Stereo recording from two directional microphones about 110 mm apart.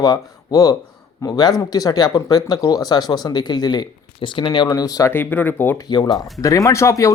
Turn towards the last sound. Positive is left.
turn(degrees=30)  # may be behind; listen again after turning